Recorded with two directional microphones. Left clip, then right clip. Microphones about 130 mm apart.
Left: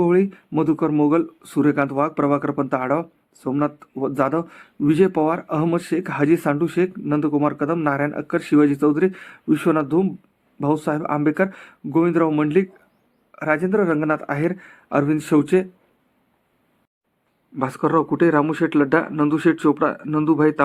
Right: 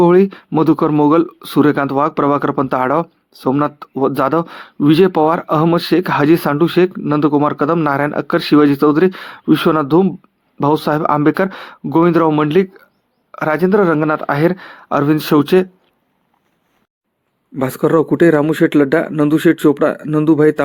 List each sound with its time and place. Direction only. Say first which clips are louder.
0.0 s speech: right 8 dB; 40° right (ahead or behind)
17.6 s speech: right 6 dB; 50° right (ahead or behind)